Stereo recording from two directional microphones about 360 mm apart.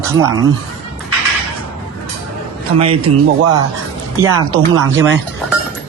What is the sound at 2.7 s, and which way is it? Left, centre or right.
Speech, centre.